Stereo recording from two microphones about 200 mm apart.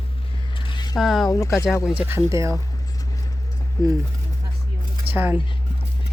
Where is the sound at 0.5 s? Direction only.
25° left (ahead or behind).